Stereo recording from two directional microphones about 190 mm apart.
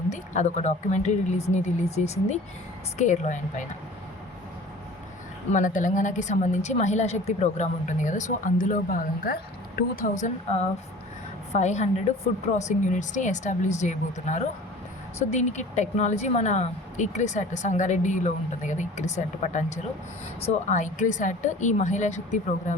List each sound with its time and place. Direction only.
0.1 s a woman's voice: 40° left (ahead or behind)
5.5 s a woman's voice: 40° left (ahead or behind)